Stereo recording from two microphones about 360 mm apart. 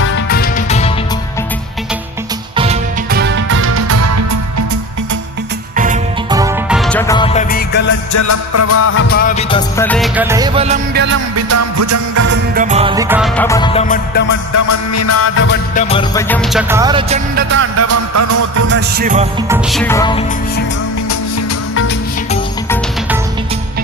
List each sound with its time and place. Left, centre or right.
0.0 s music: left
2.6 s music: right
5.7 s music: right
6.3 s music: centre; by 7.9 s left
8.1 s music: left
9.0 s music: left; by 11.0 s centre
11.0 s music: right
12.2 s music: right; by 14.3 s left
14.5 s music: left
15.7 s music: centre
17.3 s music: right
18.7 s music: right
19.5 s music: centre